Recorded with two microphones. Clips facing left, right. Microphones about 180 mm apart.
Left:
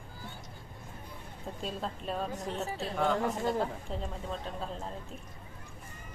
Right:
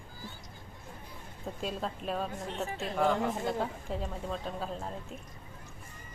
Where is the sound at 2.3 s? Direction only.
35° left (ahead or behind).